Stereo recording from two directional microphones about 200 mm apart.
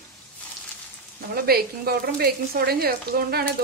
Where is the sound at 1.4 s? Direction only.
50° right (ahead or behind).